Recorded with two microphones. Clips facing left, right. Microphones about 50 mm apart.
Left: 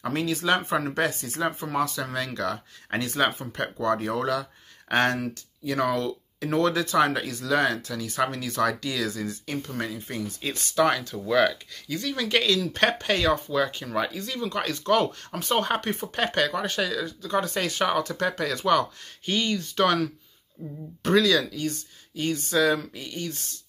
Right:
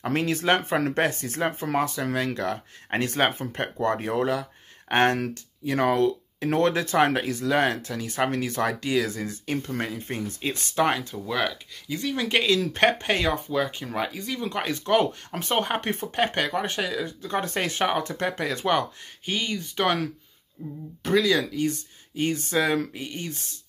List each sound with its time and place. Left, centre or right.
0.0 s speech: right
11.2 s speech: centre
11.9 s speech: right
19.2 s speech: centre
21.3 s speech: right